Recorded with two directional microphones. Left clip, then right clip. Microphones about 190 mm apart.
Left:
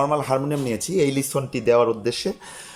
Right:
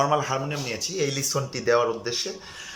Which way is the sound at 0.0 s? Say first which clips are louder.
Left 2 dB; 20° left (ahead or behind).